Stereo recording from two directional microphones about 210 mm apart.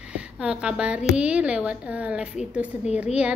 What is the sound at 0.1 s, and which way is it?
A woman's voice, 5° right (ahead or behind).